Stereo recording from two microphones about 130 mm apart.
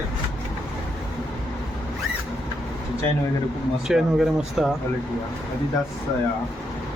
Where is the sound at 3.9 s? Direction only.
5° right (ahead or behind).